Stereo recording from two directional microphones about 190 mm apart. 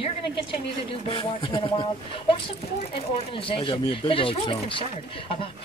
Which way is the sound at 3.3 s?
25° left (ahead or behind).